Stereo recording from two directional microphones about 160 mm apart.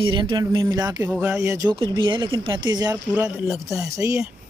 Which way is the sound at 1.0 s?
10° right (ahead or behind).